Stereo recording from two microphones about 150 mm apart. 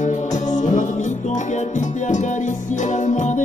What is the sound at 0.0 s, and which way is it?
Music, 55° left (ahead or behind).